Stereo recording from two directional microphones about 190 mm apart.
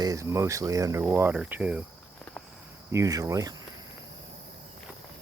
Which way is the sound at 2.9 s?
15° right (ahead or behind).